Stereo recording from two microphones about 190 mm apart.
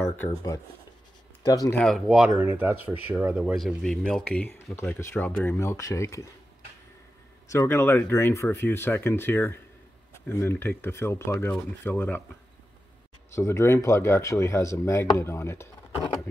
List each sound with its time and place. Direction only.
0.3 s speech: 20° left (ahead or behind)
1.8 s speech: centre (ahead or behind)
7.4 s speech: 15° left (ahead or behind)
13.3 s speech: 15° left (ahead or behind)